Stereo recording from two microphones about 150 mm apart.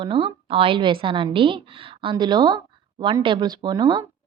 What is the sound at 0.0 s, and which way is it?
A woman's voice, 35° right (ahead or behind).